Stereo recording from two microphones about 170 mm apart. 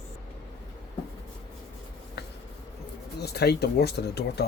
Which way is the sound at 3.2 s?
75° left (ahead or behind).